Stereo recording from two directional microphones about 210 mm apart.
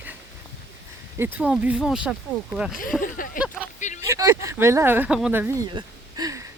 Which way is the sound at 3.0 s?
40° left (ahead or behind).